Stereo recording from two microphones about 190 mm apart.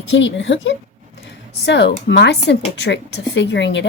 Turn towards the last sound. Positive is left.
turn(degrees=70)  # may be behind; listen again after turning